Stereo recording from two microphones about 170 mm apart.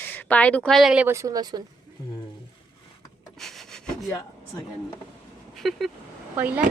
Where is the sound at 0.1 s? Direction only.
10° left (ahead or behind).